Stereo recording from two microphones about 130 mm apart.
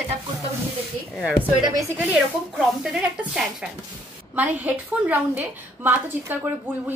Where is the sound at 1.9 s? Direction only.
5° right (ahead or behind).